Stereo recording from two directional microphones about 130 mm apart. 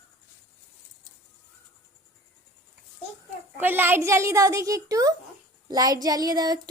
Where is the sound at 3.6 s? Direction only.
15° right (ahead or behind).